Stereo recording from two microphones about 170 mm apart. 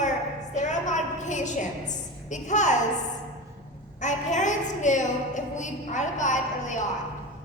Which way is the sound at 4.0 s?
45° left (ahead or behind).